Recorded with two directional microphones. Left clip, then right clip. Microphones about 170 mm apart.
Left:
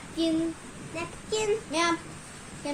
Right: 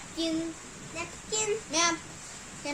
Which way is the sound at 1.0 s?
15° left (ahead or behind).